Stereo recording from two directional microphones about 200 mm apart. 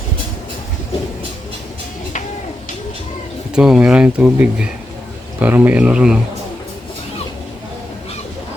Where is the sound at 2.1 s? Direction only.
40° left (ahead or behind).